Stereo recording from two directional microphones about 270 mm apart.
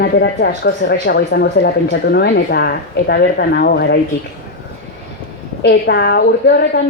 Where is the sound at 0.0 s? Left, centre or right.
Left.